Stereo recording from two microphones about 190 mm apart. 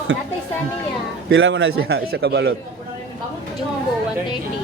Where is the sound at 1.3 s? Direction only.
65° right (ahead or behind).